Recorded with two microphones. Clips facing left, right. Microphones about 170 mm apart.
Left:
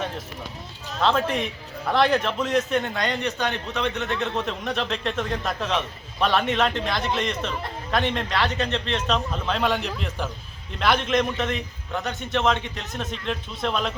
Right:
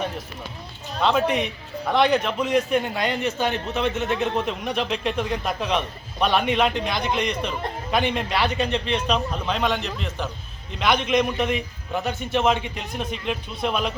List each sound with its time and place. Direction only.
0.9 s a man's voice: centre (ahead or behind)
4.6 s a man's voice: 5° right (ahead or behind)